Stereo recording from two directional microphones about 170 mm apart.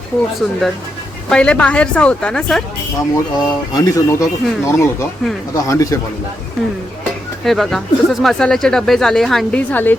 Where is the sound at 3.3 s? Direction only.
20° left (ahead or behind).